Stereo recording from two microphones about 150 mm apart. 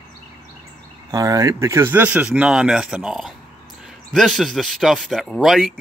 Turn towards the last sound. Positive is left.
turn(degrees=0)  # may be behind; listen again after turning